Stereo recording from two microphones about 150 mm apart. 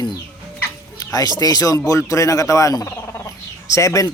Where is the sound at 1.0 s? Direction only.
25° left (ahead or behind).